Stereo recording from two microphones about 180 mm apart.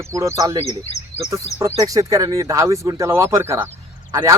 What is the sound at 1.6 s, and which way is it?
Speech, 20° right (ahead or behind).